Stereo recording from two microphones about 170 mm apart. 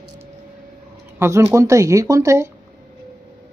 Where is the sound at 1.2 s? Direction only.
15° right (ahead or behind).